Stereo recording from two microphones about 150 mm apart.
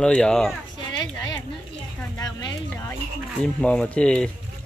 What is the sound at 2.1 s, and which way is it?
Speech, 25° left (ahead or behind).